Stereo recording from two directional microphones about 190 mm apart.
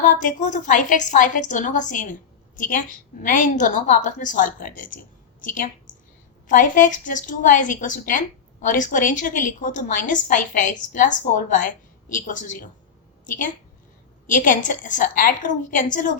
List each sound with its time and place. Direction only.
0.0 s a woman's voice: 45° left (ahead or behind)
6.5 s a woman's voice: 45° left (ahead or behind)